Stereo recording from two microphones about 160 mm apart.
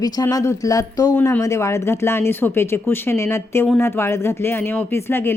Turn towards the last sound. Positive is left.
turn(degrees=15)  # may be behind; listen again after turning